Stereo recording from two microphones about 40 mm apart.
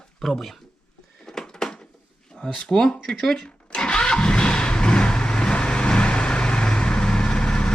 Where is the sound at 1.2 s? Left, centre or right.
Centre.